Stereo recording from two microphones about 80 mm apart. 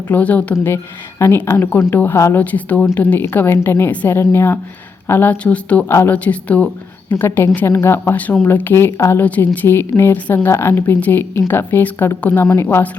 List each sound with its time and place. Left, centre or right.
0.1 s a woman's voice: centre
0.5 s a woman's voice: left
7.1 s a woman's voice: left
9.2 s a woman's voice: left